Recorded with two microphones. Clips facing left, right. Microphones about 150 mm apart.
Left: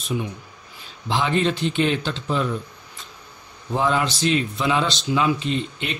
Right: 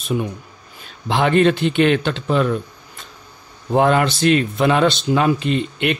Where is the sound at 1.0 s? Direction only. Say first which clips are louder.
Right 6 dB; 60° right (ahead or behind).